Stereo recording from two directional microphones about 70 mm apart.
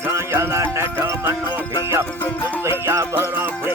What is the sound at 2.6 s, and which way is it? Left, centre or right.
Music, right.